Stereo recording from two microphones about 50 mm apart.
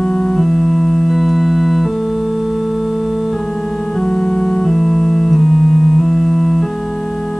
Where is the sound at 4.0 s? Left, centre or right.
Centre.